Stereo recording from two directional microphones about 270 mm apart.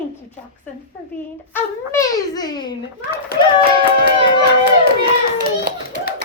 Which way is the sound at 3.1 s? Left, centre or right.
Left.